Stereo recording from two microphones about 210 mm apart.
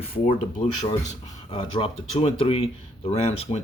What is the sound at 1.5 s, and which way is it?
Speech, 25° left (ahead or behind).